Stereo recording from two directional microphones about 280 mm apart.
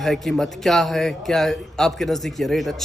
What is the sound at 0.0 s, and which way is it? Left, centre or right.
A man's voice, centre.